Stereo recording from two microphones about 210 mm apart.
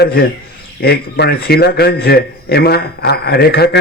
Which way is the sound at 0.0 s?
50° left (ahead or behind).